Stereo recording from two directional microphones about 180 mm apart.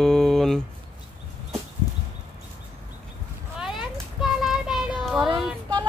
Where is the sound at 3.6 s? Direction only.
5° right (ahead or behind).